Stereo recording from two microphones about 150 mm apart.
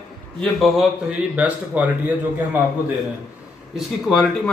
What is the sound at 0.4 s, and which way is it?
Speech, centre (ahead or behind).